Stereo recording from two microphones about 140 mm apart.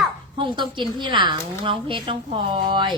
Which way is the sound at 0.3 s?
35° right (ahead or behind).